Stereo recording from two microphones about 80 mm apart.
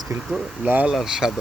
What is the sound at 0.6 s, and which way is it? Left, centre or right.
Speech, centre.